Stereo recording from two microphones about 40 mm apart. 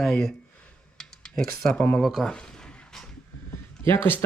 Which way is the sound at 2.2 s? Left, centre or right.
Left.